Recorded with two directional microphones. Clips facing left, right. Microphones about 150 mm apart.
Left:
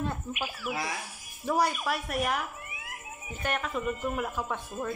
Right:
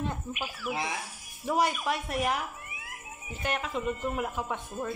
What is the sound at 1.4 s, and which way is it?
A man's voice, 20° right (ahead or behind).